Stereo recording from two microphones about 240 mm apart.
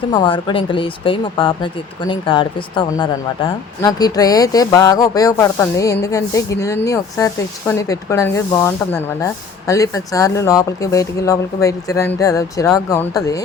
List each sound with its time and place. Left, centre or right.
0.1 s speech: centre